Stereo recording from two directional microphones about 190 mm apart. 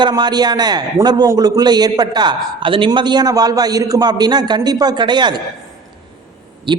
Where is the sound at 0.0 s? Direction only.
20° right (ahead or behind).